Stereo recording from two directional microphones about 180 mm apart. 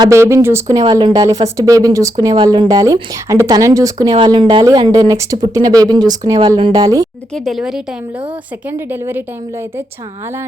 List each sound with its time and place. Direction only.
0.0 s speech: 15° right (ahead or behind)
7.3 s speech: centre (ahead or behind)
8.9 s a woman's voice: 10° right (ahead or behind)